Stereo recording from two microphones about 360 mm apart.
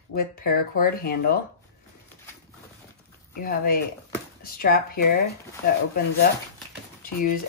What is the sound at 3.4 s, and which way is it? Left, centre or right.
Speech, left.